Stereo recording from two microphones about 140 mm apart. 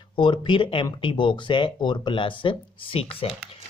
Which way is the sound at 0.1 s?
35° left (ahead or behind).